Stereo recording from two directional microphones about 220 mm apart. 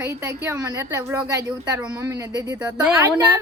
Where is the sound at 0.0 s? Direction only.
10° right (ahead or behind).